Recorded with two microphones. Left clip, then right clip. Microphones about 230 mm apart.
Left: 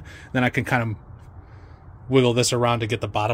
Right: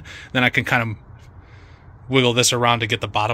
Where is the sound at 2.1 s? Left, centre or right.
Centre.